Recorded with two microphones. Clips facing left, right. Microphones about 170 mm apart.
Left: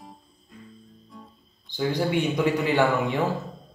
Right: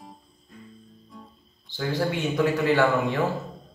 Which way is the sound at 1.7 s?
15° left (ahead or behind).